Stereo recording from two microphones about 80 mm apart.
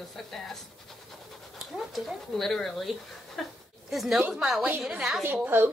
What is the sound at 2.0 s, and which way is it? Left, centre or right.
A woman's voice, centre.